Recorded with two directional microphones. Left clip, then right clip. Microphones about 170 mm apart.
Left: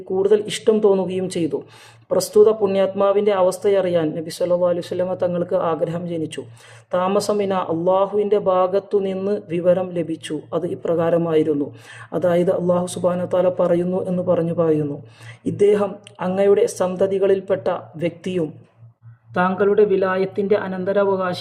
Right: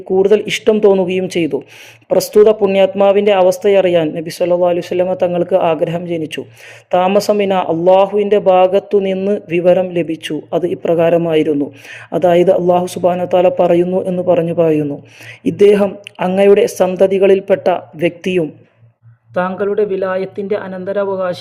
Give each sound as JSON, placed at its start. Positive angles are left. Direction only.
{"t": 0.1, "sound": "a man's voice", "side_deg": -20}